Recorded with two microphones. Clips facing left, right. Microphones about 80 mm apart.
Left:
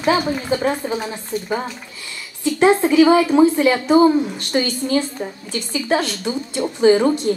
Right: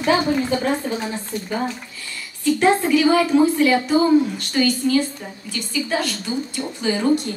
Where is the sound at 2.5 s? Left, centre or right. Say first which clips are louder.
Left 5 dB; left.